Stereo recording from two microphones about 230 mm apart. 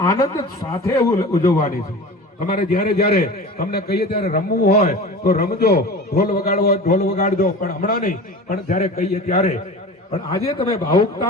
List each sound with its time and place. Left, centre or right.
0.0 s a man's voice: centre
2.6 s a man's voice: left